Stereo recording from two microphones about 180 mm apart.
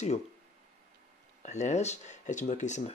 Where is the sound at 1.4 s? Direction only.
40° left (ahead or behind).